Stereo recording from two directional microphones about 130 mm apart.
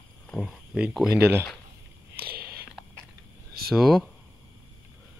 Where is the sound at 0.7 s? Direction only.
5° right (ahead or behind).